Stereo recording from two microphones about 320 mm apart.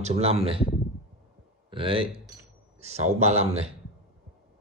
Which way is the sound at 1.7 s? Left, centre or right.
Centre.